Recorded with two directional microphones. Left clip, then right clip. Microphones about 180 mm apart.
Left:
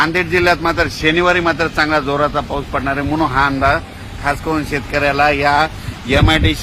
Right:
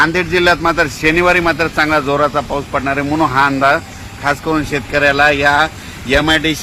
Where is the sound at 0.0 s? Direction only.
50° right (ahead or behind).